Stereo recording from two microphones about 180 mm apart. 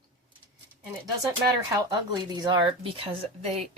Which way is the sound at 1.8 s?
20° right (ahead or behind).